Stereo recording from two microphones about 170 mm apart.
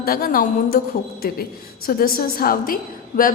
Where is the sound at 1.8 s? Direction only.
60° left (ahead or behind).